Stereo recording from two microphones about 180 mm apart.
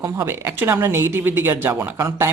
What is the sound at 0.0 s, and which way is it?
Speech, 20° right (ahead or behind).